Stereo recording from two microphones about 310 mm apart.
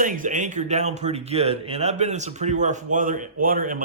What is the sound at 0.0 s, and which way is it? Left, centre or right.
A man's voice, right.